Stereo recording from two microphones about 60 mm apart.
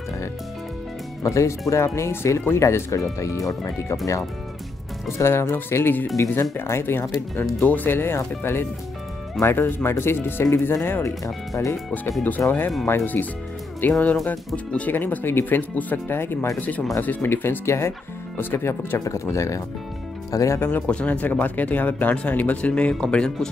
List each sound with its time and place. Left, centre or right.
1.2 s speech: left
5.1 s speech: left
9.4 s speech: left
12.4 s speech: left
15.0 s speech: left
16.5 s speech: left
18.9 s speech: left
20.5 s speech: left
20.8 s speech: left